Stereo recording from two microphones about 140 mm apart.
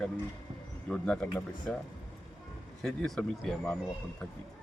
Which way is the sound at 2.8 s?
Centre (ahead or behind).